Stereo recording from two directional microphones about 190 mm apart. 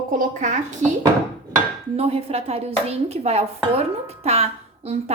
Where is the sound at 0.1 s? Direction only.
40° right (ahead or behind).